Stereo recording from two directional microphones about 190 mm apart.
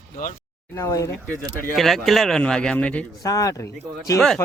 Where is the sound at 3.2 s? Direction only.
20° left (ahead or behind).